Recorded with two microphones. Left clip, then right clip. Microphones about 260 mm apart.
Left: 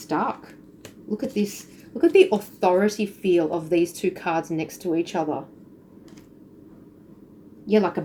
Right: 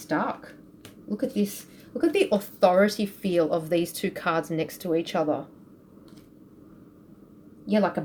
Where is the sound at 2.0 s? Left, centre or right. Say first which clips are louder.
Left 6 dB; right.